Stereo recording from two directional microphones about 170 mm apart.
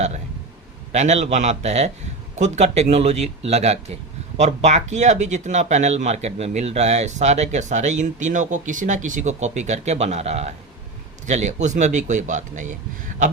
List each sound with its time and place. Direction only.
0.9 s a man's voice: 40° right (ahead or behind)